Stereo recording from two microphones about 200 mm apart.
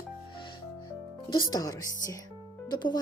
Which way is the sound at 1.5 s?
20° left (ahead or behind).